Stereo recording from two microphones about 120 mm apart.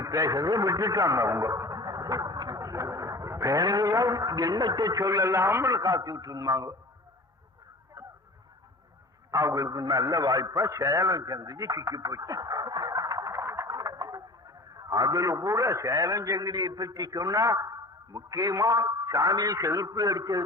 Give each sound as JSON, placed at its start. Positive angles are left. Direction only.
{"t": 0.0, "sound": "a man's voice", "side_deg": -30}
{"t": 9.3, "sound": "a man's voice", "side_deg": -30}